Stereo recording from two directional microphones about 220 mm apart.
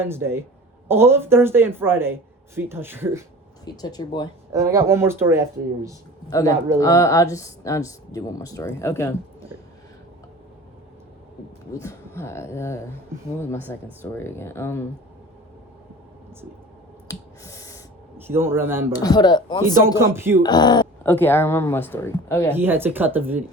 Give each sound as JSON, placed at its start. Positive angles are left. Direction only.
{"t": 0.0, "sound": "speech", "side_deg": -10}
{"t": 3.8, "sound": "speech", "side_deg": 20}
{"t": 4.5, "sound": "speech", "side_deg": -15}
{"t": 6.2, "sound": "a man's voice", "side_deg": 15}
{"t": 11.8, "sound": "speech", "side_deg": 10}
{"t": 14.0, "sound": "speech", "side_deg": 10}
{"t": 17.1, "sound": "finger snapping", "side_deg": 15}
{"t": 18.2, "sound": "speech", "side_deg": -10}
{"t": 18.9, "sound": "speech", "side_deg": 20}
{"t": 20.0, "sound": "speech", "side_deg": -10}
{"t": 20.4, "sound": "speech", "side_deg": 20}
{"t": 22.5, "sound": "speech", "side_deg": -10}